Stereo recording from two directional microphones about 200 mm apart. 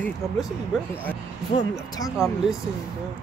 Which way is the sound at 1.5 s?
30° left (ahead or behind).